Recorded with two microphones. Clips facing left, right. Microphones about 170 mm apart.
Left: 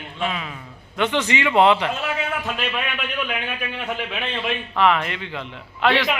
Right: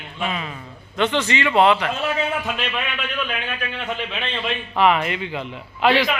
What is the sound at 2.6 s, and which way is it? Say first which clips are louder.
A man's voice: even; 10° left (ahead or behind).